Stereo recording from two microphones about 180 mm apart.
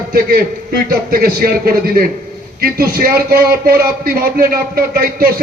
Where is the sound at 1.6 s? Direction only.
55° right (ahead or behind).